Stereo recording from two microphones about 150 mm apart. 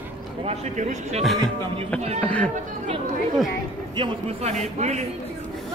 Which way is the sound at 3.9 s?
35° right (ahead or behind).